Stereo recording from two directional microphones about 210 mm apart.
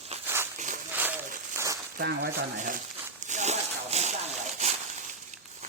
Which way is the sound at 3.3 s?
35° right (ahead or behind).